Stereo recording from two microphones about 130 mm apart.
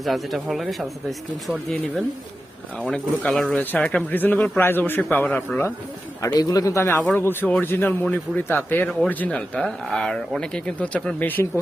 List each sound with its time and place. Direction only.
0.0 s speech: centre (ahead or behind)
2.7 s a man's voice: 10° left (ahead or behind)
6.2 s a man's voice: 30° left (ahead or behind)